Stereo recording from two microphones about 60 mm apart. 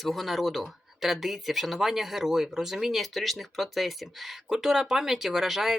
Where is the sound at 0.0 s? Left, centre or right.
Centre.